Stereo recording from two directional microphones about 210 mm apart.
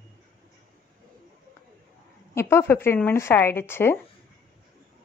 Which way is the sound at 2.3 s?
10° left (ahead or behind).